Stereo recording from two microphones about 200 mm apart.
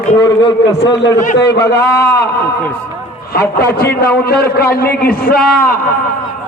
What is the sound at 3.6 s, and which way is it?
A man's voice, 50° left (ahead or behind).